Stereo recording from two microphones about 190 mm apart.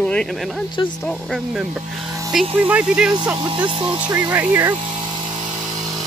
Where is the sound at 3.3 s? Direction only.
25° right (ahead or behind).